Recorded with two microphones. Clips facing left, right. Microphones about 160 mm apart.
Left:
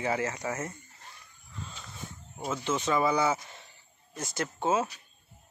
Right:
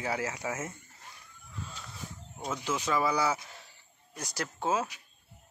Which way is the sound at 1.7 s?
Centre (ahead or behind).